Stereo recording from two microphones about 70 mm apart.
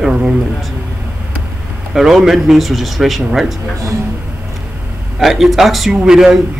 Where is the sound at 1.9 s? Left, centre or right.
Centre.